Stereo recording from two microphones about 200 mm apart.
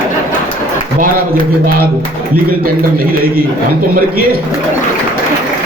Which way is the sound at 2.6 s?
50° right (ahead or behind).